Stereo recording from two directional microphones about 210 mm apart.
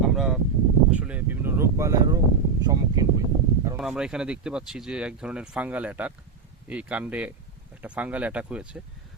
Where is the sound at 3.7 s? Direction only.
5° right (ahead or behind).